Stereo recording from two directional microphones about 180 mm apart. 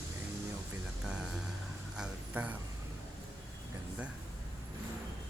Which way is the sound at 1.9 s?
5° right (ahead or behind).